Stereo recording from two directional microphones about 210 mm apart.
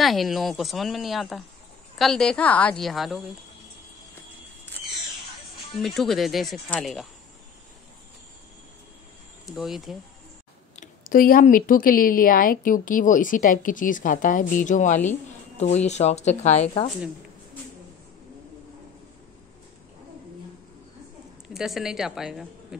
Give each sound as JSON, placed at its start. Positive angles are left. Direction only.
{"t": 0.0, "sound": "speech", "side_deg": 0}
{"t": 5.8, "sound": "speech", "side_deg": 0}
{"t": 9.5, "sound": "speech", "side_deg": 0}
{"t": 10.8, "sound": "speech", "side_deg": 40}
{"t": 21.5, "sound": "speech", "side_deg": 0}